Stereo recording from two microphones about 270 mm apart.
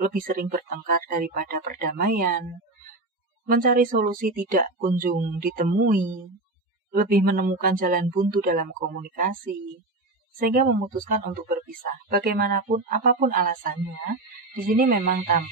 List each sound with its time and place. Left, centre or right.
0.0 s speech: right
3.4 s speech: right
10.4 s speech: right
14.8 s speech: right